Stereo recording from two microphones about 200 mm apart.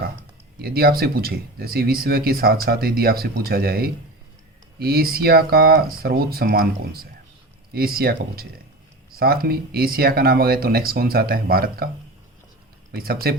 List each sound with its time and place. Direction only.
0.6 s speech: 50° right (ahead or behind)
12.9 s speech: 50° right (ahead or behind)